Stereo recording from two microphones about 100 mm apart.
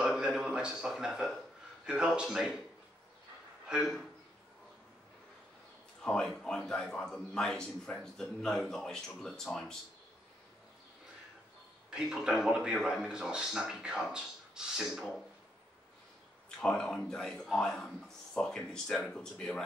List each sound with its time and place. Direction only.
0.0 s a sound: 5° right (ahead or behind)
1.9 s speech: 10° right (ahead or behind)
3.6 s speech: 5° right (ahead or behind)
6.0 s a man's voice: 10° left (ahead or behind)
11.9 s speech: 5° right (ahead or behind)
16.4 s a man's voice: 10° left (ahead or behind)